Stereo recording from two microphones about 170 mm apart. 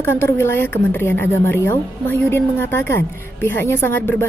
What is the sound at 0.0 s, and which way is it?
A woman's voice, 15° left (ahead or behind).